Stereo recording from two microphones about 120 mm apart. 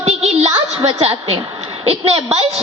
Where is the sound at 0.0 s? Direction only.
60° right (ahead or behind).